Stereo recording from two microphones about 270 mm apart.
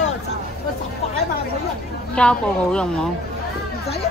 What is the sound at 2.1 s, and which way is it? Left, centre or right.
Speech, centre.